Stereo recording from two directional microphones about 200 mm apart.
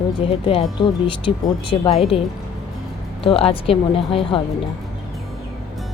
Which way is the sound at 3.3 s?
30° left (ahead or behind).